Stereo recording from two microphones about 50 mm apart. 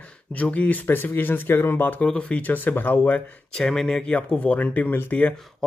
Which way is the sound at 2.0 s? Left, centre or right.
Left.